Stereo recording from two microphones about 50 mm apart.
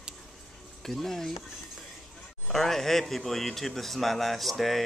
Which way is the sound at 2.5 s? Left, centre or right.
Centre.